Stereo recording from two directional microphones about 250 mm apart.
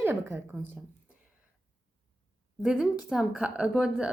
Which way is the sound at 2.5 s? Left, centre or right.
Centre.